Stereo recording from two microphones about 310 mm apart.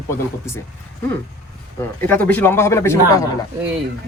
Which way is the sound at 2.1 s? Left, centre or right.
Centre.